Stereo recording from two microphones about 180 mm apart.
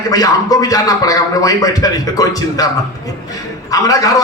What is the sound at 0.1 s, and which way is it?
A man's voice, 20° left (ahead or behind).